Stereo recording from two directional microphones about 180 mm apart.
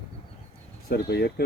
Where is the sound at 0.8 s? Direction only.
60° left (ahead or behind).